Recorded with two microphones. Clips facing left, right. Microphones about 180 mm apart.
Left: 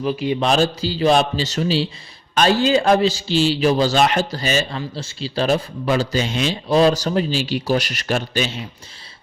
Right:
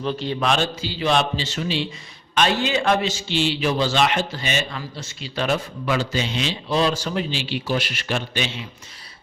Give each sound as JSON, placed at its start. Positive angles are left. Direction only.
{"t": 0.0, "sound": "speech", "side_deg": 10}
{"t": 0.3, "sound": "a man's voice", "side_deg": 40}